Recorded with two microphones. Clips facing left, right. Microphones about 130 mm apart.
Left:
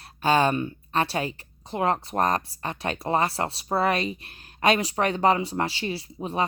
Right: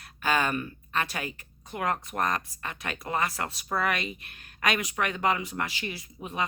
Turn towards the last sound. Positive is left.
turn(degrees=30)  # may be behind; listen again after turning